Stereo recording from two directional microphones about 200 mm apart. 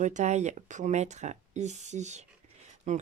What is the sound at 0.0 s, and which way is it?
Speech, 35° right (ahead or behind).